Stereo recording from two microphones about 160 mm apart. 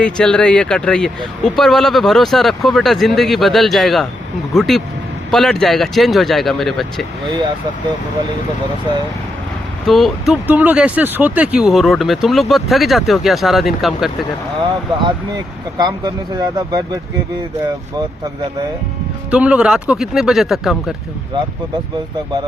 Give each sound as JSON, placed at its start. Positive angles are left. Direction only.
{"t": 0.0, "sound": "speech", "side_deg": 5}
{"t": 7.3, "sound": "speech", "side_deg": -30}
{"t": 9.8, "sound": "speech", "side_deg": 0}
{"t": 10.4, "sound": "speech", "side_deg": -10}
{"t": 15.8, "sound": "speech", "side_deg": -25}
{"t": 19.3, "sound": "speech", "side_deg": -10}